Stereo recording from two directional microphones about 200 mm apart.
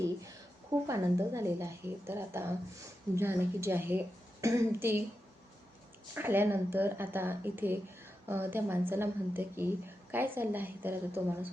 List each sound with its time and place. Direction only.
0.0 s a sound: 15° right (ahead or behind)
0.9 s a woman's voice: 15° right (ahead or behind)
6.1 s a woman's voice: 10° right (ahead or behind)